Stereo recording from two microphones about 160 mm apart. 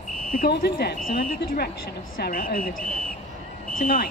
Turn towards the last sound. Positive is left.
turn(degrees=70)  # may be behind; listen again after turning